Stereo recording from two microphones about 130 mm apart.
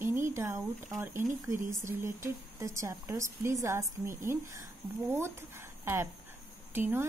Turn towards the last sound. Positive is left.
turn(degrees=-15)  # may be behind; listen again after turning